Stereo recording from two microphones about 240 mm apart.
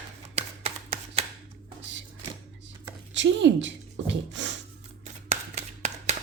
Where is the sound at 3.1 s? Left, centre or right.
Right.